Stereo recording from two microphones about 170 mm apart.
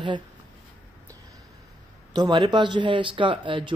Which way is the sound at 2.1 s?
25° right (ahead or behind).